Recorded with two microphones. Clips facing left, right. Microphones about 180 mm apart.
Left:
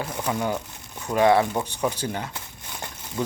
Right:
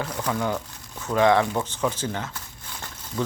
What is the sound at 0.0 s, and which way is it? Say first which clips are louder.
Speech: even; 20° left (ahead or behind).